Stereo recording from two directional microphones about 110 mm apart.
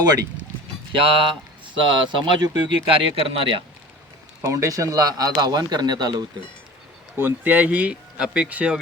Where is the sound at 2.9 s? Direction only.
60° right (ahead or behind).